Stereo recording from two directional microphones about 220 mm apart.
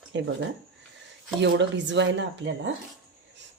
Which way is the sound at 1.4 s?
55° right (ahead or behind).